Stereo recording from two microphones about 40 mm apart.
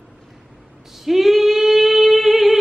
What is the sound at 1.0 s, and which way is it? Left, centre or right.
Female singing, centre.